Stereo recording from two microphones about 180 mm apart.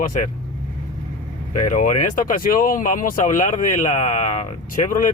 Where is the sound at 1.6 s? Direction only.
45° left (ahead or behind).